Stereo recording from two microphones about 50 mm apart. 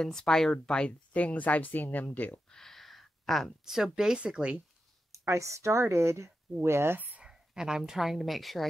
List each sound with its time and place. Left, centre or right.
0.0 s speech: centre
1.1 s speech: left
2.0 s speech: left
2.5 s a sound: centre
3.6 s speech: centre
5.2 s speech: right
7.0 s a sound: right
7.2 s a woman's voice: centre